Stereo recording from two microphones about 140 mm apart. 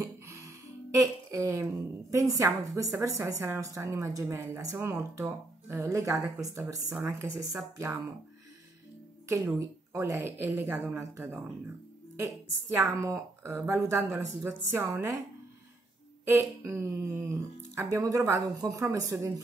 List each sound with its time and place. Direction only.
0.0 s music: 20° right (ahead or behind)
0.9 s a woman's voice: 20° right (ahead or behind)
9.6 s a woman's voice: 20° right (ahead or behind)
16.3 s a woman's voice: 20° right (ahead or behind)